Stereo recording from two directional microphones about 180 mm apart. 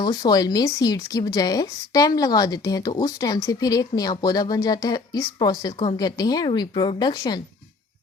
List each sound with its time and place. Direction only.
0.0 s speech: 25° left (ahead or behind)